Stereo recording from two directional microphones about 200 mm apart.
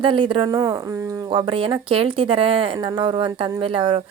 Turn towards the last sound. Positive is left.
turn(degrees=-25)  # may be behind; listen again after turning